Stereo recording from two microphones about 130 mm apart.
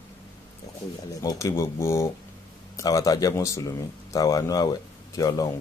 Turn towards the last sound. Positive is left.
turn(degrees=25)  # may be behind; listen again after turning